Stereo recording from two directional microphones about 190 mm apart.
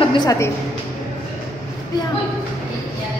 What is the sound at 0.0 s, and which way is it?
Speech, 25° left (ahead or behind).